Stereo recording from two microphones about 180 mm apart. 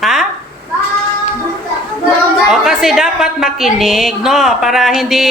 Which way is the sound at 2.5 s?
Centre (ahead or behind).